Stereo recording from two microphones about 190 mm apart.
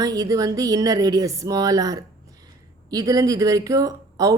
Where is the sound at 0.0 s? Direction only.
20° right (ahead or behind).